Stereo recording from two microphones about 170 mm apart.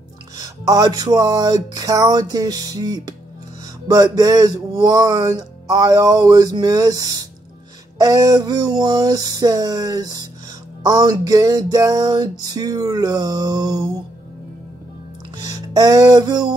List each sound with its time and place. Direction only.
0.4 s speech: 20° right (ahead or behind)
15.3 s music: 25° right (ahead or behind)